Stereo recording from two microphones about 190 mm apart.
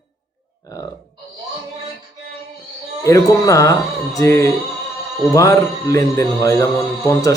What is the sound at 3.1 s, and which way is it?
A man's voice, 15° left (ahead or behind).